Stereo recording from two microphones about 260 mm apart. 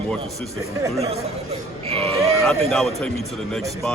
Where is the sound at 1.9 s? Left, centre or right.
Right.